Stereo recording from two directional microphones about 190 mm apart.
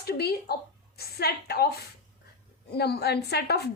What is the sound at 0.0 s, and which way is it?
A woman's voice, 55° left (ahead or behind).